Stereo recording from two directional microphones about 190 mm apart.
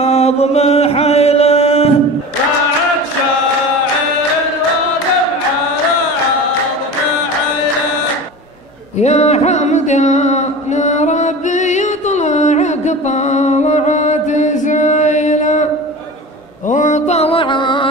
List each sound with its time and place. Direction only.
0.0 s chant: 30° left (ahead or behind)
9.0 s music: 35° left (ahead or behind)
16.6 s mantra: 40° left (ahead or behind); by 17.8 s 25° left (ahead or behind)